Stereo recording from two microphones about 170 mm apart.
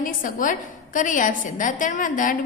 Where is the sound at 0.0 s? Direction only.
55° left (ahead or behind).